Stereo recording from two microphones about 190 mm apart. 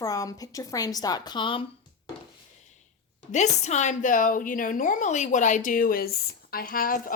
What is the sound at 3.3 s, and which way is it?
A woman's voice, 40° left (ahead or behind).